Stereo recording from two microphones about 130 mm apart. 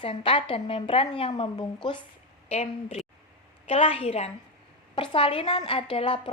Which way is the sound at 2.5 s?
55° left (ahead or behind).